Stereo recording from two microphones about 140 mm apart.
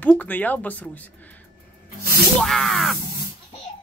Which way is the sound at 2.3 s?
Centre (ahead or behind).